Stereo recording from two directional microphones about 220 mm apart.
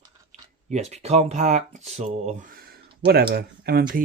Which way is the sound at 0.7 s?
30° right (ahead or behind).